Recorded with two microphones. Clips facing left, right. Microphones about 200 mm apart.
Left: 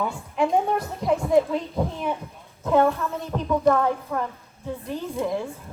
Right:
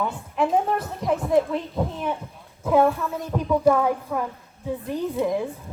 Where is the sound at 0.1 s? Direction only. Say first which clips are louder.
Even; 5° right (ahead or behind).